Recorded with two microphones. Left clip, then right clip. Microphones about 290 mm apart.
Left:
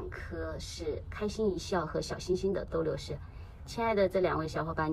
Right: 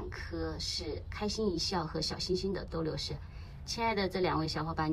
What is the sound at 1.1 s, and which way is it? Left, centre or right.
Speech, centre.